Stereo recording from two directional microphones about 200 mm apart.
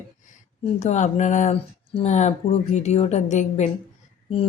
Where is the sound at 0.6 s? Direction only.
35° left (ahead or behind).